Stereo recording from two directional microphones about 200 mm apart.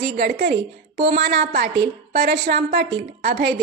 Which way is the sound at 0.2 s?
50° right (ahead or behind).